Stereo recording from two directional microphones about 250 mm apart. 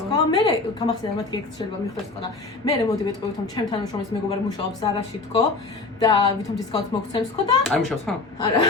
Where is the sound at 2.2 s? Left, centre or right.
Centre.